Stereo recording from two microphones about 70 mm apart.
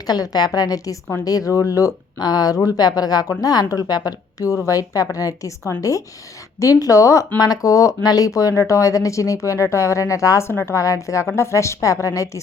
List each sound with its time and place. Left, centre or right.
0.1 s a woman's voice: left
7.3 s speech: left
10.8 s speech: left